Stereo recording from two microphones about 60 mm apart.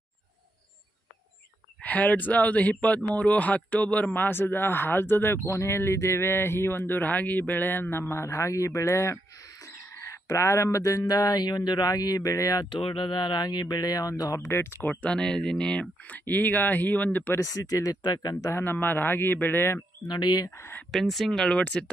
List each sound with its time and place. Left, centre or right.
1.8 s speech: left
7.0 s speech: left
8.2 s a man's voice: left
10.0 s speech: left
13.7 s speech: left
14.5 s a man's voice: left
15.0 s speech: centre
16.3 s speech: left
17.3 s speech: left
18.6 s speech: left
20.2 s speech: left
20.9 s speech: centre